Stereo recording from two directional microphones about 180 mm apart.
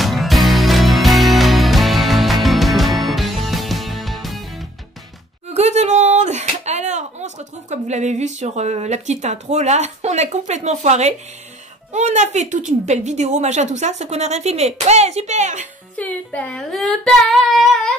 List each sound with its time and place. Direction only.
0.0 s music: centre (ahead or behind)
5.5 s a sound: 35° right (ahead or behind)
11.9 s a woman's voice: 40° right (ahead or behind)
16.0 s speech: 10° left (ahead or behind)